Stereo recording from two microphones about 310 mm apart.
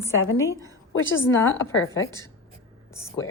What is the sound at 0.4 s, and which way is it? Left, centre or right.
Speech, centre.